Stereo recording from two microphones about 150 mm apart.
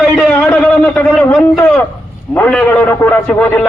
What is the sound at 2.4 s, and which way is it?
A man's voice, 10° left (ahead or behind).